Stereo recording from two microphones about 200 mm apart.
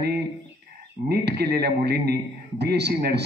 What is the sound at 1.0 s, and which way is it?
A man's voice, 55° right (ahead or behind).